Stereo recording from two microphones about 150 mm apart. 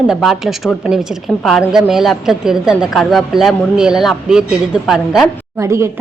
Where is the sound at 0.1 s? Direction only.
Centre (ahead or behind).